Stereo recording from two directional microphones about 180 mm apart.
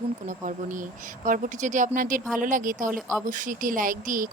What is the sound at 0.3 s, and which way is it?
Speech, 45° right (ahead or behind).